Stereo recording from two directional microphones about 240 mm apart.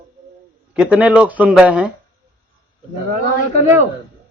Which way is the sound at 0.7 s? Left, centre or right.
Centre.